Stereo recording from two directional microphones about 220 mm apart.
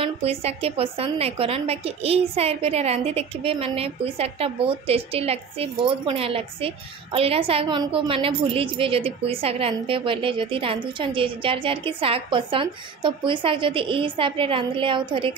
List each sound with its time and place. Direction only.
0.0 s a woman's voice: 25° right (ahead or behind)